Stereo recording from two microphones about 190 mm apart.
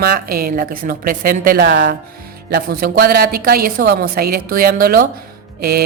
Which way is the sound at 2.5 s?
55° right (ahead or behind).